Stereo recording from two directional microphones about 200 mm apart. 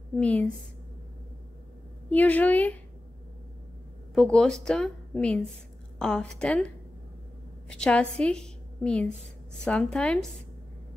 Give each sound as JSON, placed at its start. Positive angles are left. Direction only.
{"t": 0.2, "sound": "a woman's voice", "side_deg": 5}
{"t": 2.0, "sound": "a woman's voice", "side_deg": 5}
{"t": 4.1, "sound": "a woman's voice", "side_deg": 5}
{"t": 7.7, "sound": "a woman's voice", "side_deg": 5}